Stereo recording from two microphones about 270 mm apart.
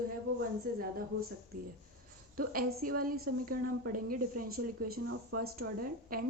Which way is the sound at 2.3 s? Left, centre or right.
Right.